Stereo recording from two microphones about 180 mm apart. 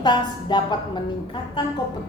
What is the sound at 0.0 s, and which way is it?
A woman's voice, 25° left (ahead or behind).